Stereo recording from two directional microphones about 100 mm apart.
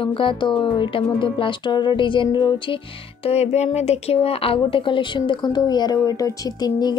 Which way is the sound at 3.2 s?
90° left.